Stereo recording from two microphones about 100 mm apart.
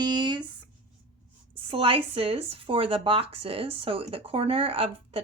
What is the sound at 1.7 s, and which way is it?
Speech, 70° right (ahead or behind).